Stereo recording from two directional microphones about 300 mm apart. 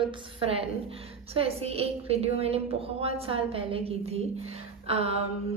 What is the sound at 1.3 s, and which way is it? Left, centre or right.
A woman's voice, centre.